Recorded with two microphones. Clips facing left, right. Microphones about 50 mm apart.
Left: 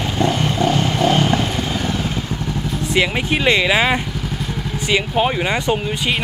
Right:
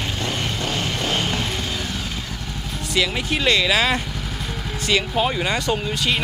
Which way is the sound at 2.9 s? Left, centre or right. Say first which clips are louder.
Left 3 dB; left.